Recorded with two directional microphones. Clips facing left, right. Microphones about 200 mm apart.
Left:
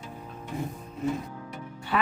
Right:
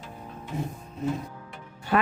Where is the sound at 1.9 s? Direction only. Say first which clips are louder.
Right 2 dB; 50° right (ahead or behind).